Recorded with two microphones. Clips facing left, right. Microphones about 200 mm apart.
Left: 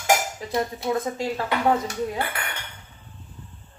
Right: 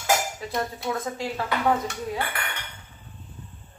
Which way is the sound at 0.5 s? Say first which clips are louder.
Left 5 dB; 20° left (ahead or behind).